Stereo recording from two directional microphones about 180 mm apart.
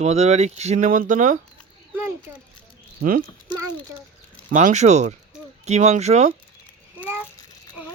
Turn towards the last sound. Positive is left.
turn(degrees=-5)  # may be behind; listen again after turning